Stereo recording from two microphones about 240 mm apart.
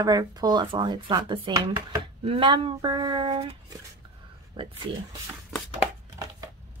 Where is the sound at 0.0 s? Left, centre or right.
Centre.